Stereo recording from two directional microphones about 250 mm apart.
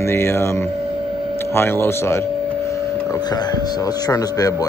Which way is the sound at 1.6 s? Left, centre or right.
Centre.